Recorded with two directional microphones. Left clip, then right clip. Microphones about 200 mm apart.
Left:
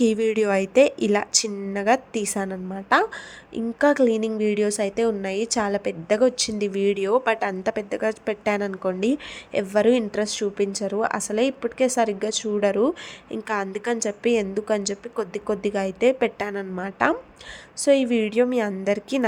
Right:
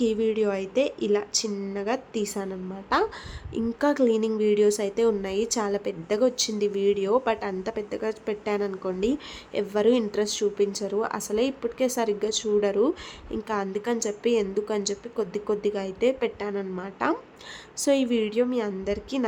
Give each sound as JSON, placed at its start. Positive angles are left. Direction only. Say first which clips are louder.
{"t": 0.0, "sound": "a woman's voice", "louder": "left 3 dB", "side_deg": 25}